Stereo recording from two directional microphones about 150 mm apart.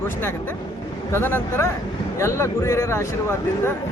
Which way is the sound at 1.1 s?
15° left (ahead or behind).